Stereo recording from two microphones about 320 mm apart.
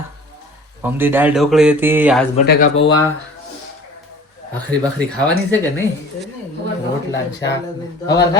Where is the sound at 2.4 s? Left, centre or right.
Left.